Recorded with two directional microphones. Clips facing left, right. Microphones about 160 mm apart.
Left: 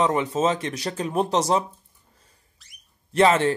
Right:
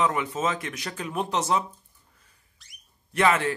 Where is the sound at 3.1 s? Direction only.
30° left (ahead or behind).